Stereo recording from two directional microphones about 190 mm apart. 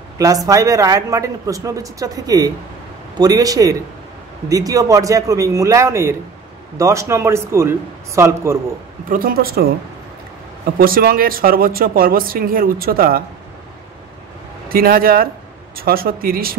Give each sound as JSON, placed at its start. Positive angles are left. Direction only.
{"t": 0.5, "sound": "a man's voice", "side_deg": -15}
{"t": 9.1, "sound": "speech", "side_deg": -50}
{"t": 10.8, "sound": "speech", "side_deg": -50}
{"t": 14.7, "sound": "speech", "side_deg": -50}